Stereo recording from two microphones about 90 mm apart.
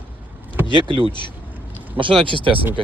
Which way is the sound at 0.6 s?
65° right (ahead or behind).